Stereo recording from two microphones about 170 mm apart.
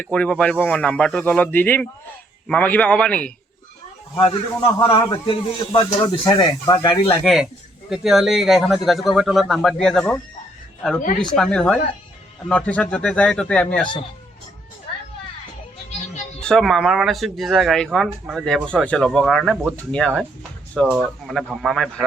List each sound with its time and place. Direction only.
0.0 s speech: 5° left (ahead or behind)
4.2 s a man's voice: 30° left (ahead or behind)
7.2 s speech: centre (ahead or behind)
11.2 s speech: 5° left (ahead or behind)
16.4 s speech: 5° left (ahead or behind)